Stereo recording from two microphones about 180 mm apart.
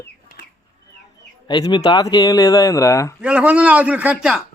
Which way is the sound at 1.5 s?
25° left (ahead or behind).